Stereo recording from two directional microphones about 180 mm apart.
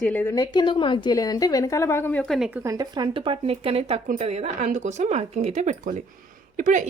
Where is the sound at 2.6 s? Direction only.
20° right (ahead or behind).